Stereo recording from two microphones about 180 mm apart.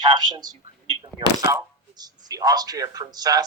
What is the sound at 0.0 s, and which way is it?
A woman's voice, 25° right (ahead or behind).